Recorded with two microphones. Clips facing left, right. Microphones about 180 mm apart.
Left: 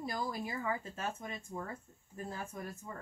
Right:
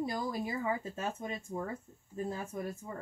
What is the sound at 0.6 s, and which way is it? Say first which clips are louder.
Speech: right 3 dB; 20° right (ahead or behind).